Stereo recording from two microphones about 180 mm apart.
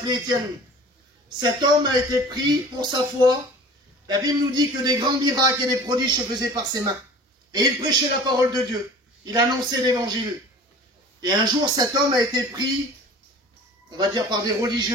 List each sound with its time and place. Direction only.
1.4 s a man's voice: 25° right (ahead or behind)
13.8 s a man's voice: 25° right (ahead or behind)